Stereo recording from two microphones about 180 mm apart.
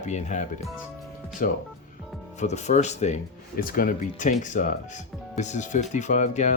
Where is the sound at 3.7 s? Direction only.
50° left (ahead or behind).